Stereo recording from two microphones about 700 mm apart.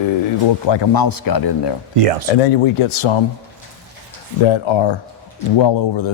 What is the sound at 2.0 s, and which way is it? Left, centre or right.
Speech, right.